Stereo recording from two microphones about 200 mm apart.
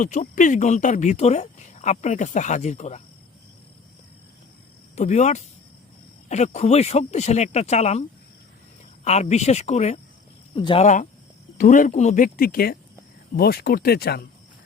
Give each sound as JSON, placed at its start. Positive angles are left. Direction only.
{"t": 0.0, "sound": "speech", "side_deg": 40}
{"t": 4.9, "sound": "speech", "side_deg": 35}
{"t": 9.0, "sound": "speech", "side_deg": 35}
{"t": 10.8, "sound": "speech", "side_deg": 35}